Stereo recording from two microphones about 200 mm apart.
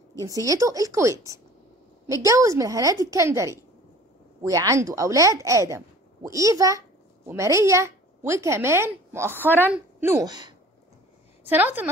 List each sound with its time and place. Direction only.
0.2 s a woman's voice: 15° right (ahead or behind)
11.4 s speech: 10° right (ahead or behind)